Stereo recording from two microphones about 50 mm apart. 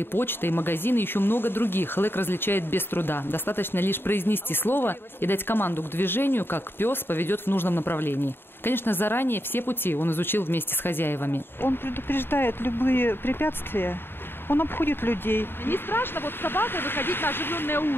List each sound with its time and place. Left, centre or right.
0.0 s speech: left